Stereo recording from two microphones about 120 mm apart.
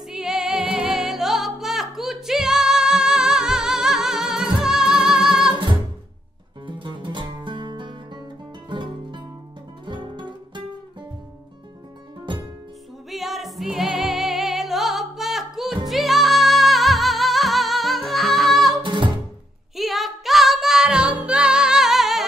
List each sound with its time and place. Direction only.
0.1 s music: 5° right (ahead or behind)
5.5 s music: 40° right (ahead or behind)
13.1 s music: centre (ahead or behind)
18.8 s music: 40° right (ahead or behind)
19.7 s music: centre (ahead or behind)